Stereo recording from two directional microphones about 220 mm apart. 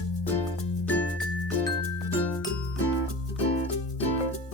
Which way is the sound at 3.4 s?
25° left (ahead or behind).